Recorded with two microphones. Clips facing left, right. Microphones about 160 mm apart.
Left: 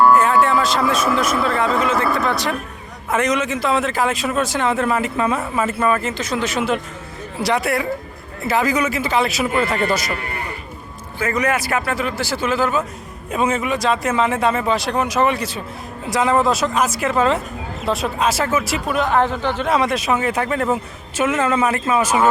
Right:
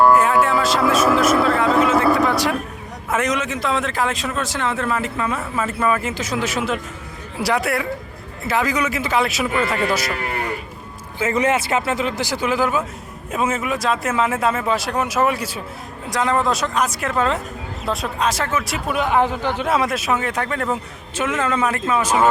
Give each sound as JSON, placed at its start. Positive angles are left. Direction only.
{"t": 0.0, "sound": "a man's voice", "side_deg": -10}
{"t": 5.6, "sound": "speech", "side_deg": 0}
{"t": 11.2, "sound": "a man's voice", "side_deg": -20}
{"t": 16.0, "sound": "speech", "side_deg": 5}
{"t": 18.9, "sound": "a man's voice", "side_deg": -10}